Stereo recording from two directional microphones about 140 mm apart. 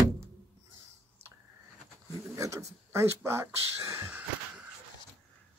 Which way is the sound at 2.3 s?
20° right (ahead or behind).